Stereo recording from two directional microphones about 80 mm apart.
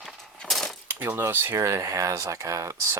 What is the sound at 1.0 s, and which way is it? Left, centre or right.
Speech, right.